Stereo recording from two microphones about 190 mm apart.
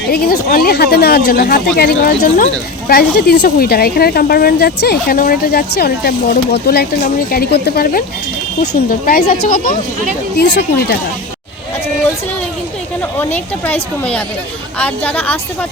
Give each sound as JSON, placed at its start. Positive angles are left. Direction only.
{"t": 0.1, "sound": "speech", "side_deg": 50}
{"t": 10.3, "sound": "speech", "side_deg": 60}
{"t": 13.0, "sound": "a woman's voice", "side_deg": 10}